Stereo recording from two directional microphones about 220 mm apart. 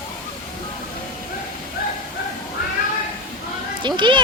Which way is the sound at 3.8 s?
20° right (ahead or behind).